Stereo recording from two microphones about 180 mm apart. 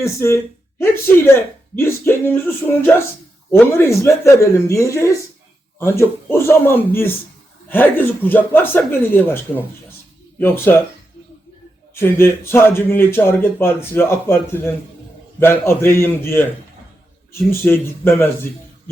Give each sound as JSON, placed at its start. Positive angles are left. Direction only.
{"t": 0.0, "sound": "a man's voice", "side_deg": 15}
{"t": 6.3, "sound": "a man's voice", "side_deg": 15}
{"t": 10.4, "sound": "a man's voice", "side_deg": 10}
{"t": 11.9, "sound": "a man's voice", "side_deg": 10}